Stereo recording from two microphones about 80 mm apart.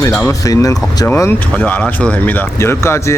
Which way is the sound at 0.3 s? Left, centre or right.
Left.